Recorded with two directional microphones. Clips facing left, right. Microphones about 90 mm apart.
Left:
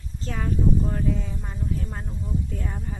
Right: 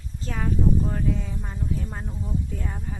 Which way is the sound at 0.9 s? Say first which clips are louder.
Even; centre (ahead or behind).